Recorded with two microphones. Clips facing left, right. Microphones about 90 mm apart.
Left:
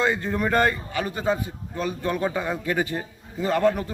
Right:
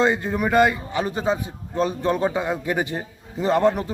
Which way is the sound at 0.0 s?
20° right (ahead or behind).